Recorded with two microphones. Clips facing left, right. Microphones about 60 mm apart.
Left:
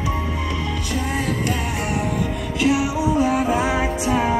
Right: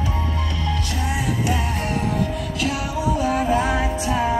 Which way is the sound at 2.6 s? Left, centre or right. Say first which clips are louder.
Left 5 dB; centre.